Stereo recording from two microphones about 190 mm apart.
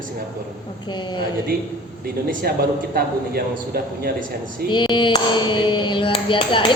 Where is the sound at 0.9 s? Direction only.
25° left (ahead or behind).